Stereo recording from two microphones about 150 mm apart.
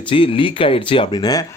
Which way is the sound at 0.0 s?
35° left (ahead or behind).